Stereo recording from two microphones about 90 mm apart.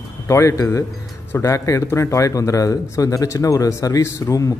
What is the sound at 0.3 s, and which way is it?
Speech, 35° left (ahead or behind).